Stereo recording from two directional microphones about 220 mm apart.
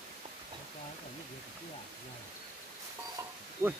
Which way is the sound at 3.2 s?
15° right (ahead or behind).